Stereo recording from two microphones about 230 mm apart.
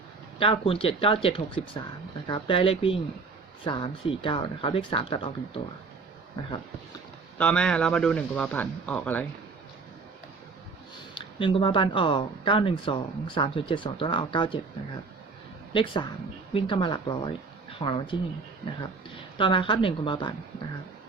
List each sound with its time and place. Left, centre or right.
0.3 s speech: left
7.3 s speech: centre
11.1 s speech: left
15.7 s speech: left
19.4 s speech: left